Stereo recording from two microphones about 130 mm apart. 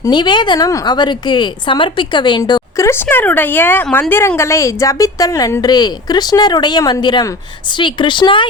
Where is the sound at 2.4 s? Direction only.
25° left (ahead or behind).